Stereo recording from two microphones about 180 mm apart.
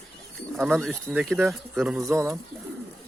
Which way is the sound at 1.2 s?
Centre (ahead or behind).